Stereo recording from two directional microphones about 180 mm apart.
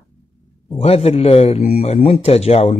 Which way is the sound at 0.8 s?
35° left (ahead or behind).